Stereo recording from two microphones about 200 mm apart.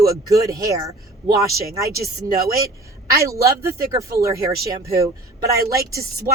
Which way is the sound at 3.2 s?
15° right (ahead or behind).